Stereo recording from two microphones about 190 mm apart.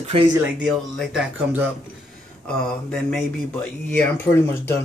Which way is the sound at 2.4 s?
5° left (ahead or behind).